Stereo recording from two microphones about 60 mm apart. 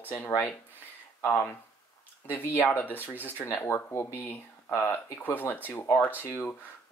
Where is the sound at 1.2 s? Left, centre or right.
Left.